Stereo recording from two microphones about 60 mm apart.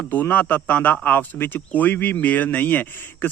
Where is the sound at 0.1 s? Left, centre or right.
Left.